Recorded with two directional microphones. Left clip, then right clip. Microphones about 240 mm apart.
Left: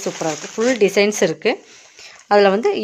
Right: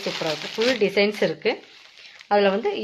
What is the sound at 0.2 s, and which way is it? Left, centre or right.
Speech, left.